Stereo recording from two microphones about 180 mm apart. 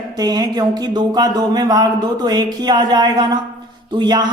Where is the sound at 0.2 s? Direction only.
20° right (ahead or behind).